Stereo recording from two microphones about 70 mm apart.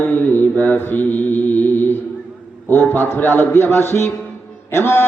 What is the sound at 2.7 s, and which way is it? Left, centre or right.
A man's voice, left.